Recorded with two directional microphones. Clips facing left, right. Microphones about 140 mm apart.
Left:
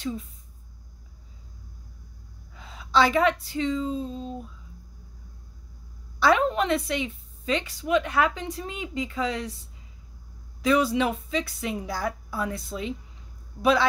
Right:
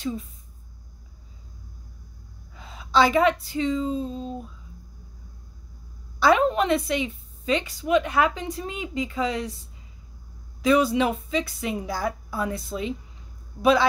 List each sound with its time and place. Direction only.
2.5 s a woman's voice: 15° right (ahead or behind)
6.1 s a woman's voice: 10° right (ahead or behind)
10.6 s a woman's voice: 15° right (ahead or behind)